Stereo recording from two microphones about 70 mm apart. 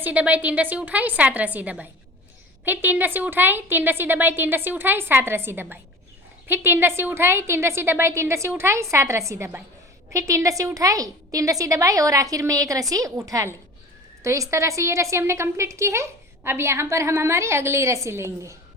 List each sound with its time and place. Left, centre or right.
0.0 s a woman's voice: right